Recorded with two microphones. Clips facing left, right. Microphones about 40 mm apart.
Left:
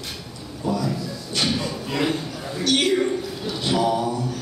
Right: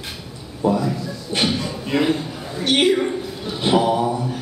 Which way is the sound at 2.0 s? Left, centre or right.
Centre.